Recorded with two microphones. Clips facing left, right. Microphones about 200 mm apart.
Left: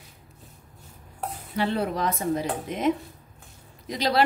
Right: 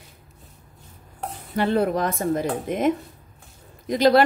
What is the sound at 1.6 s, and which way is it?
Speech, 50° right (ahead or behind).